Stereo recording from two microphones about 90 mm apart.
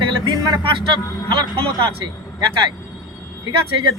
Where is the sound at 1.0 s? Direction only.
40° left (ahead or behind).